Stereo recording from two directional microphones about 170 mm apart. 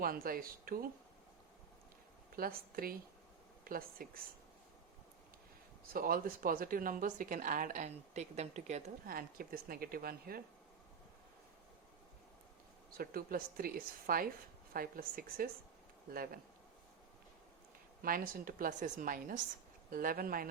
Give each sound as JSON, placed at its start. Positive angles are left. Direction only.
{"t": 0.0, "sound": "speech", "side_deg": -60}
{"t": 2.3, "sound": "speech", "side_deg": -60}
{"t": 5.9, "sound": "speech", "side_deg": -60}
{"t": 9.0, "sound": "speech", "side_deg": -60}
{"t": 12.9, "sound": "speech", "side_deg": -60}
{"t": 18.0, "sound": "speech", "side_deg": -55}